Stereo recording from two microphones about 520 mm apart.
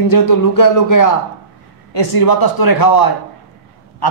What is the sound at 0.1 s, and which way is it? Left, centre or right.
A man's voice, left.